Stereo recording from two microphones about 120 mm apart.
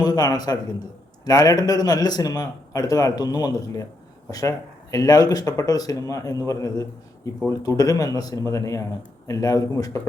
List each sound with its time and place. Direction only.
0.0 s a man's voice: 35° left (ahead or behind)